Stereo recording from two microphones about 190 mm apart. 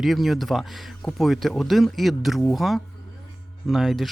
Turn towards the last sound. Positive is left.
turn(degrees=0)  # may be behind; listen again after turning